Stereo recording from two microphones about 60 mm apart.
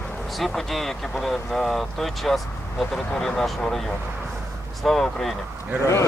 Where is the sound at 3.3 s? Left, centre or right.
Centre.